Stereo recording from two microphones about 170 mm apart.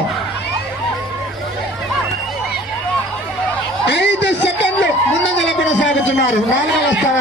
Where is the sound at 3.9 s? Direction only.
90° left.